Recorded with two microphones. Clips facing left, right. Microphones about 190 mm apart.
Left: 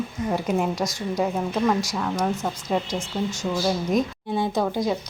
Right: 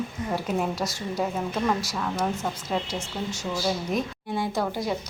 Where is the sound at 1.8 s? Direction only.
5° right (ahead or behind).